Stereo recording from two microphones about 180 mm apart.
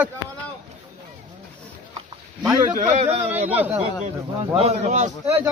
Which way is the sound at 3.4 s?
10° right (ahead or behind).